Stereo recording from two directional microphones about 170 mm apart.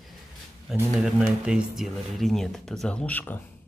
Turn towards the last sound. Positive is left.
turn(degrees=10)  # may be behind; listen again after turning